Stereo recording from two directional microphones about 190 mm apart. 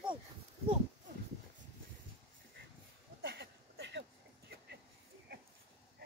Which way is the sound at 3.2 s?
60° right (ahead or behind).